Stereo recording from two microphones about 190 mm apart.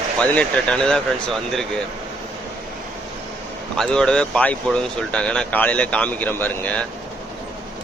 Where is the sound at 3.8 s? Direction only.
5° left (ahead or behind).